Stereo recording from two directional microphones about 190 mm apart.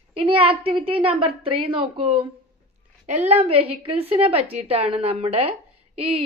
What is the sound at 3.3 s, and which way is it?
A woman's voice, 30° right (ahead or behind).